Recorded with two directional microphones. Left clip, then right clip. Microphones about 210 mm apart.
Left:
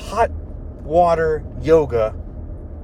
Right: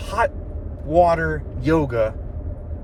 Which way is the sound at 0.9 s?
25° left (ahead or behind).